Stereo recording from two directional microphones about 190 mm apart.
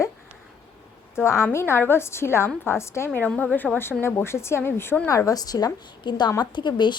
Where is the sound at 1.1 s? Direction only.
15° left (ahead or behind).